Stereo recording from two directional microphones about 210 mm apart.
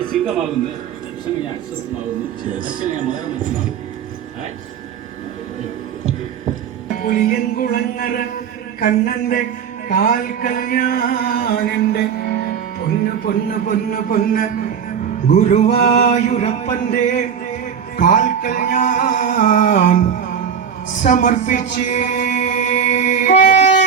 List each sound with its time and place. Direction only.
0.1 s a man's voice: centre (ahead or behind)
7.0 s music: 45° left (ahead or behind)